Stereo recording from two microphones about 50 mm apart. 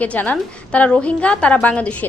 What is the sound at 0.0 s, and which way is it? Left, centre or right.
A woman's voice, left.